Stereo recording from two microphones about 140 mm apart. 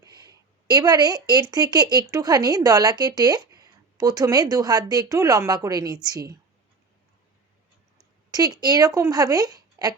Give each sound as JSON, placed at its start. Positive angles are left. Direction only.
{"t": 0.0, "sound": "speech", "side_deg": -25}
{"t": 8.3, "sound": "speech", "side_deg": -25}